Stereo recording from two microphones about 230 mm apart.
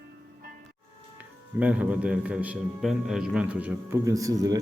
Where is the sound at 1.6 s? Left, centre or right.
Centre.